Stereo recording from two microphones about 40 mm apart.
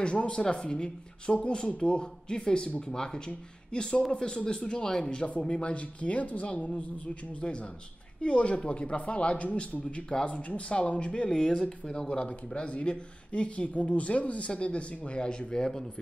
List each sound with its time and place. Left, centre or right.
0.0 s speech: left
11.2 s speech: centre